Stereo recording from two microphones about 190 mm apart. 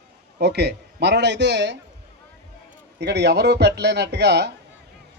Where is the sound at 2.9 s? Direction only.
60° right (ahead or behind).